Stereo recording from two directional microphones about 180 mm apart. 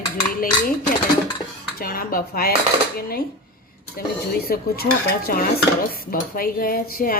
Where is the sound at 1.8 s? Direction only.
55° left (ahead or behind).